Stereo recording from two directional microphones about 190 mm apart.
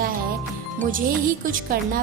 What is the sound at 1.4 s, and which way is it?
Speech, 45° right (ahead or behind).